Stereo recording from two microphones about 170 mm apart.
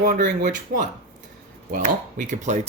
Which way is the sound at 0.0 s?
50° right (ahead or behind).